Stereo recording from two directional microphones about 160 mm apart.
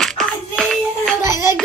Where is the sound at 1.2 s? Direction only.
15° right (ahead or behind).